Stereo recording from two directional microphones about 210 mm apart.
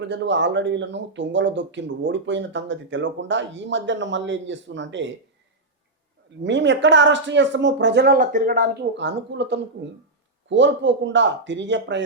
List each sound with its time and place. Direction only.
0.0 s speech: 55° right (ahead or behind)
6.4 s speech: 60° right (ahead or behind); by 8.7 s 40° right (ahead or behind)
9.0 s speech: 55° right (ahead or behind)